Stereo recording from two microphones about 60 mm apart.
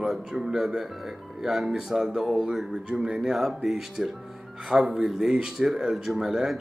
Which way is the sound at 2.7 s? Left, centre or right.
Centre.